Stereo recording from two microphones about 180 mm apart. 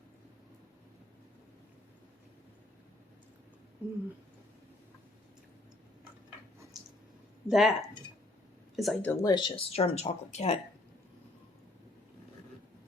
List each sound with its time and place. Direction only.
3.8 s speech: 10° right (ahead or behind)
7.4 s speech: centre (ahead or behind)
8.7 s speech: centre (ahead or behind)
9.0 s speech: 20° left (ahead or behind); by 10.6 s 35° left (ahead or behind)